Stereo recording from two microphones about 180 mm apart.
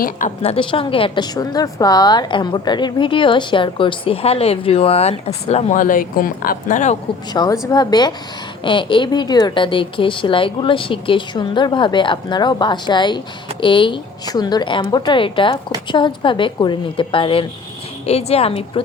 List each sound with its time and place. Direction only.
0.0 s a woman's voice: 40° left (ahead or behind)
7.3 s a woman's voice: 20° left (ahead or behind)